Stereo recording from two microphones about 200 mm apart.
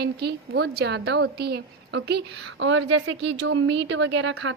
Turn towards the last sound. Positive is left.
turn(degrees=-65)  # may be behind; listen again after turning